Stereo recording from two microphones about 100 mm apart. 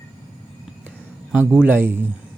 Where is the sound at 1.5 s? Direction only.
15° right (ahead or behind).